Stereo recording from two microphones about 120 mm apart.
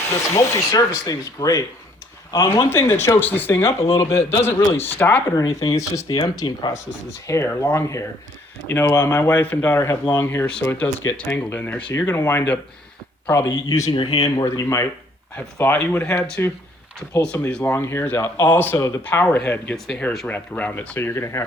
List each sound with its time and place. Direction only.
0.3 s speech: 25° left (ahead or behind)
5.3 s speech: 30° left (ahead or behind)
7.3 s speech: 20° left (ahead or behind)
13.9 s speech: 45° left (ahead or behind)
14.4 s speech: 25° left (ahead or behind)
19.7 s speech: 5° left (ahead or behind); by 21.4 s 20° left (ahead or behind)